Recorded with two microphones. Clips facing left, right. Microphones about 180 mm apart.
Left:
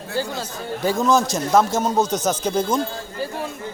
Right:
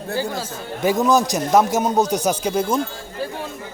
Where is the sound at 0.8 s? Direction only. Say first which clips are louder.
Right 2 dB; 15° right (ahead or behind).